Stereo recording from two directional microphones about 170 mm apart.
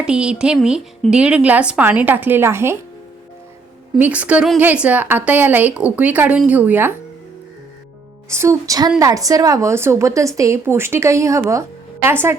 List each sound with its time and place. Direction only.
0.0 s a woman's voice: 5° right (ahead or behind)
3.9 s a woman's voice: 10° right (ahead or behind)
8.3 s a woman's voice: 15° right (ahead or behind)